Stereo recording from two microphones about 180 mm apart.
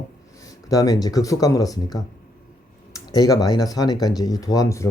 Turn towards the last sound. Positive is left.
turn(degrees=20)  # may be behind; listen again after turning